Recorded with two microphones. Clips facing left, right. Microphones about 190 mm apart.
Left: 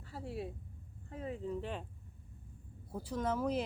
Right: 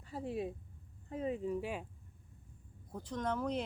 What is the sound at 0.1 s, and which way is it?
Speech, 15° right (ahead or behind).